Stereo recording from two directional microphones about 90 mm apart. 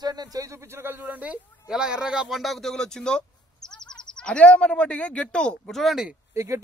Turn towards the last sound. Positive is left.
turn(degrees=-30)  # may be behind; listen again after turning